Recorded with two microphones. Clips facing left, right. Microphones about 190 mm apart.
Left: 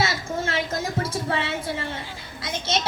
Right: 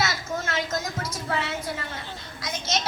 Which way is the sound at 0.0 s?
30° left (ahead or behind).